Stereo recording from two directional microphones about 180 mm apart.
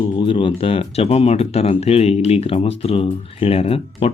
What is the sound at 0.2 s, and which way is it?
Speech, 30° left (ahead or behind).